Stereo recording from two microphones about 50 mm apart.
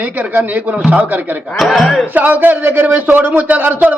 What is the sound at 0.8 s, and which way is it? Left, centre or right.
Music, right.